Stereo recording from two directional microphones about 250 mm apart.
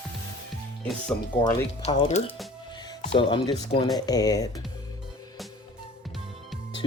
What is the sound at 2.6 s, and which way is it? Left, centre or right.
Music, centre.